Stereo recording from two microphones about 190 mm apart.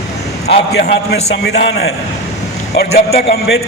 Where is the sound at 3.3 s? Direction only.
55° left (ahead or behind).